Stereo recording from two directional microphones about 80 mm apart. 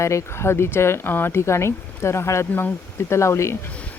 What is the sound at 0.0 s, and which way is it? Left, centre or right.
Speech, left.